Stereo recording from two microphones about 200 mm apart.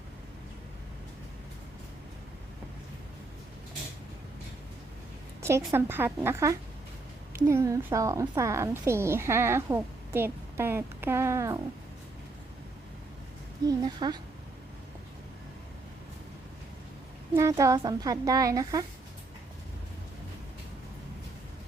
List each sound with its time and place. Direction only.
5.4 s a woman's voice: 15° right (ahead or behind)
13.7 s speech: 20° right (ahead or behind)
17.3 s a woman's voice: 15° right (ahead or behind)